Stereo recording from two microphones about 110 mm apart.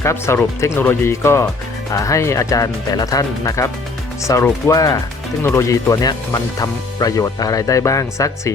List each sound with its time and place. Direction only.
0.0 s speech: 25° left (ahead or behind)